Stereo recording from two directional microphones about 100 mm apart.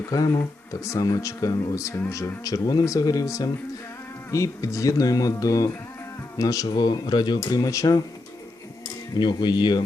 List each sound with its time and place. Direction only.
0.1 s speech: 35° left (ahead or behind)
9.1 s speech: 50° left (ahead or behind)